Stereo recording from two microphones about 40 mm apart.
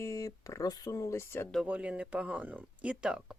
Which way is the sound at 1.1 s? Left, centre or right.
Left.